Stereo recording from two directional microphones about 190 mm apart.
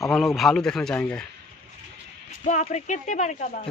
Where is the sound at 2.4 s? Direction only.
40° left (ahead or behind).